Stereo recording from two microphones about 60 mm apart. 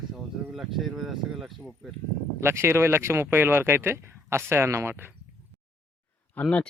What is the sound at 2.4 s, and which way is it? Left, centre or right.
Speech, right.